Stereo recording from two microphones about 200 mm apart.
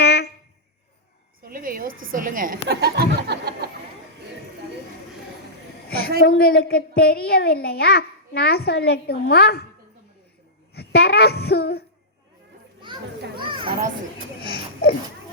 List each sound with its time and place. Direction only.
0.0 s a sound: 55° left (ahead or behind)
1.4 s a sound: 45° right (ahead or behind)
1.9 s a woman's voice: 80° right
2.1 s speech: 40° right (ahead or behind)
5.9 s a woman's voice: 50° left (ahead or behind)
10.8 s a woman's voice: 50° left (ahead or behind)
14.5 s speech: 50° left (ahead or behind)